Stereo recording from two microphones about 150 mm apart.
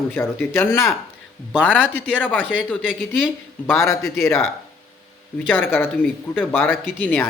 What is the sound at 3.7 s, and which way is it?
Speech, 15° left (ahead or behind).